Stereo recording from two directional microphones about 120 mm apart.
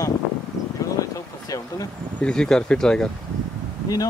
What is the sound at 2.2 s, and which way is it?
Speech, 5° left (ahead or behind).